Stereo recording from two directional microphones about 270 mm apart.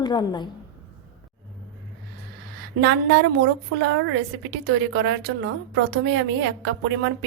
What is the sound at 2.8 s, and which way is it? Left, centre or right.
Speech, right.